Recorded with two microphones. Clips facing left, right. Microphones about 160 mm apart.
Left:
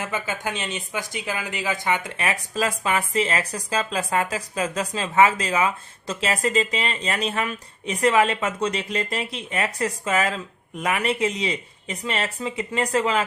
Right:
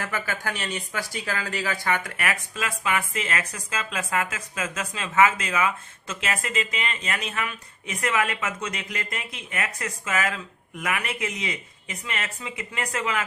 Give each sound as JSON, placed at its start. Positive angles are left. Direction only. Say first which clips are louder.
{"t": 0.0, "sound": "speech", "louder": "left 2 dB", "side_deg": 20}